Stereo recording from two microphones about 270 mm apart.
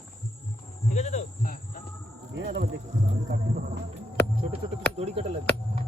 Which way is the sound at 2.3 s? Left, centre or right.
Right.